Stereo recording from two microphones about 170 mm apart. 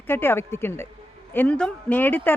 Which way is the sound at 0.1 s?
15° left (ahead or behind).